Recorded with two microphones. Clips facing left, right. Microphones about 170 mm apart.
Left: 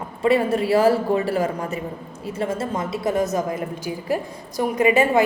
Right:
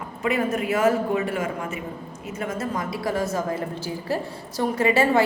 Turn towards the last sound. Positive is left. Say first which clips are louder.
# left 2 dB
turn(degrees=15)  # may be behind; listen again after turning